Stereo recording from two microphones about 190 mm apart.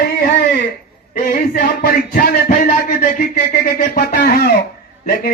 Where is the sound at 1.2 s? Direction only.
50° left (ahead or behind).